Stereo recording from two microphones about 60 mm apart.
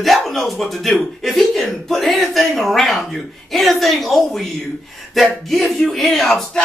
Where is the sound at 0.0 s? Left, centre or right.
Centre.